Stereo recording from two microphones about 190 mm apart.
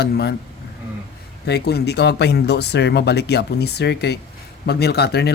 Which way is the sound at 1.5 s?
60° left (ahead or behind).